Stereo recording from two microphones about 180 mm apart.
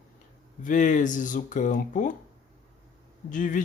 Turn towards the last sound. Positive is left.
turn(degrees=45)  # may be behind; listen again after turning